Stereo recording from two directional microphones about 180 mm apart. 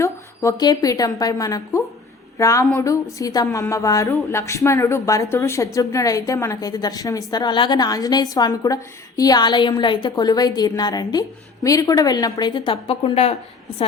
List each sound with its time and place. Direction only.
0.0 s a woman's voice: 20° left (ahead or behind)